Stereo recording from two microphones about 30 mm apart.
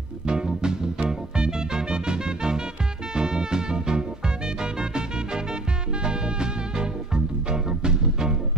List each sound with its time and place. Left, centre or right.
0.3 s music: right